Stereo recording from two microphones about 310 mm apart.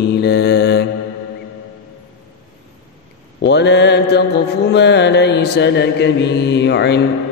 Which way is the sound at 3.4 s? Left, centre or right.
Left.